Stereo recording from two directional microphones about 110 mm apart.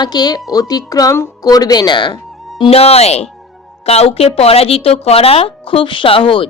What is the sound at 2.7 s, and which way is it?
A woman's voice, 65° left (ahead or behind).